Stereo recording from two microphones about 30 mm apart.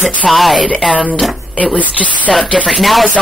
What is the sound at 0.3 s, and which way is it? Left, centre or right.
Speech, centre.